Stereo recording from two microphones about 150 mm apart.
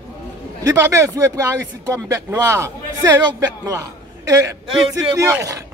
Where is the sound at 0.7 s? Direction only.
20° right (ahead or behind).